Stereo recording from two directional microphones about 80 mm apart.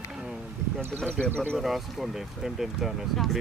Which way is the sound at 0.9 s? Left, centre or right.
Centre.